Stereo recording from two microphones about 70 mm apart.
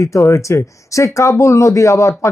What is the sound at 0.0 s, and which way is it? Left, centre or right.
Speech, left.